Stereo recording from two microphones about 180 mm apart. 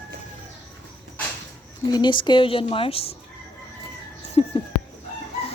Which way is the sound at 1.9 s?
25° left (ahead or behind).